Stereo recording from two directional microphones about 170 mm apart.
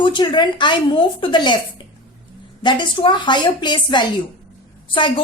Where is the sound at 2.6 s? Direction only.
30° left (ahead or behind).